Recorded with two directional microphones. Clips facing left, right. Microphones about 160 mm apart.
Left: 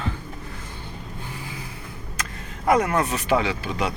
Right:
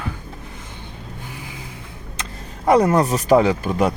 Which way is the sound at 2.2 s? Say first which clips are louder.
Right 3 dB; 30° right (ahead or behind).